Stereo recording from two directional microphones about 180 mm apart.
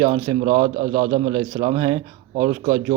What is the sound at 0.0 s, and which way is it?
Speech, 25° right (ahead or behind).